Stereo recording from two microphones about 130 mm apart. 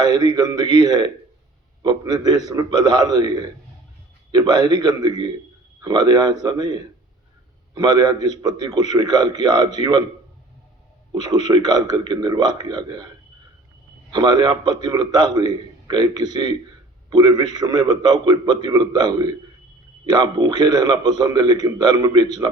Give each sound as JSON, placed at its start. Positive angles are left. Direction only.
{"t": 0.0, "sound": "a man's voice", "side_deg": -35}
{"t": 11.1, "sound": "a man's voice", "side_deg": -30}
{"t": 14.1, "sound": "a man's voice", "side_deg": -30}